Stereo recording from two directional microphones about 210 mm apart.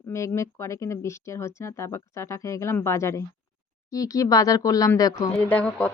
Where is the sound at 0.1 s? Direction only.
15° left (ahead or behind).